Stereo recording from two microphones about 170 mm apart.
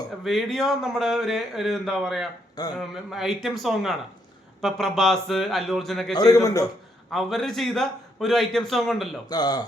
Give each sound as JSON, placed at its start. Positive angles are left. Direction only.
{"t": 0.3, "sound": "a man's voice", "side_deg": 0}
{"t": 6.1, "sound": "a man's voice", "side_deg": 20}
{"t": 7.1, "sound": "a man's voice", "side_deg": 0}
{"t": 9.3, "sound": "a man's voice", "side_deg": 25}